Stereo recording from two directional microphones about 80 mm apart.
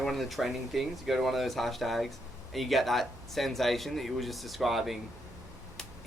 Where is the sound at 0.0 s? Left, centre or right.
Centre.